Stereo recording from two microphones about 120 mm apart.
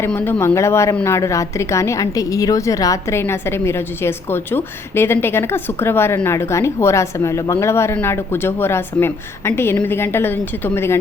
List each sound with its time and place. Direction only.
0.0 s a woman's voice: 20° left (ahead or behind)